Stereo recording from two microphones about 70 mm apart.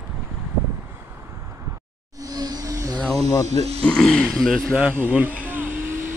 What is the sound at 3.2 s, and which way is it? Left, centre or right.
Speech, left.